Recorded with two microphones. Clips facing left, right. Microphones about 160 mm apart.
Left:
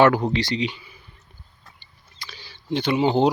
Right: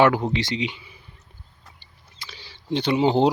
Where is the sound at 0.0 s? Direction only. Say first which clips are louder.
Left 1 dB; 20° right (ahead or behind).